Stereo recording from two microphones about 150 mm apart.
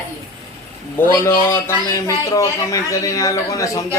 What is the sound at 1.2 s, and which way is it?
A man's voice, 20° left (ahead or behind).